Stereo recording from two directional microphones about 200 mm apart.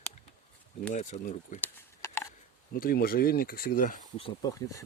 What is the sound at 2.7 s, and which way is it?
Speech, 45° left (ahead or behind).